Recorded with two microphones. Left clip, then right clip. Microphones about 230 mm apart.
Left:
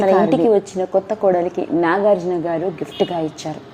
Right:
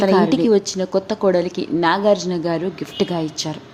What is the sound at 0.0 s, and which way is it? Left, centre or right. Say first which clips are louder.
A woman's voice: left 2 dB; centre.